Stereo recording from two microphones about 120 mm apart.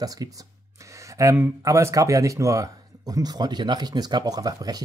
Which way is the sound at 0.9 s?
25° right (ahead or behind).